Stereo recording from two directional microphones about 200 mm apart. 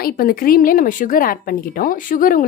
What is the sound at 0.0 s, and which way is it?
A woman's voice, 45° left (ahead or behind).